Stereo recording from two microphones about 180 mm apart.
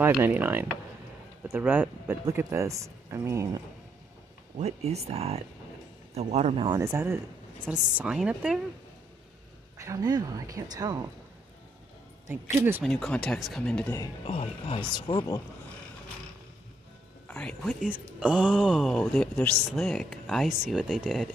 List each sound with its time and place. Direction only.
0.2 s speech: 10° right (ahead or behind)
4.6 s speech: 35° right (ahead or behind)
6.8 s speech: 15° right (ahead or behind)
9.8 s speech: 20° right (ahead or behind)
12.3 s speech: 15° right (ahead or behind)
12.8 s speech: 5° left (ahead or behind)
14.2 s speech: 35° left (ahead or behind)
17.3 s speech: 5° left (ahead or behind)
17.8 s speech: 5° right (ahead or behind)